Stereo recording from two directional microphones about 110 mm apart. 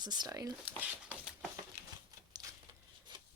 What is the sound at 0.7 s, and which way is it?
Speech, 15° right (ahead or behind).